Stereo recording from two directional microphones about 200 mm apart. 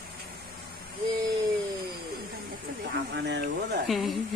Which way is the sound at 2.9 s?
60° right (ahead or behind).